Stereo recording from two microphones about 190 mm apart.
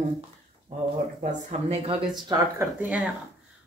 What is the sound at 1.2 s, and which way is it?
Speech, 35° right (ahead or behind).